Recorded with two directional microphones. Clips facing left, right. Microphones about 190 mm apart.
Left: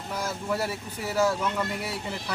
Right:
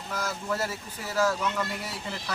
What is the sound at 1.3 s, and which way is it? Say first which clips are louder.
Speech: left 1 dB; 15° left (ahead or behind).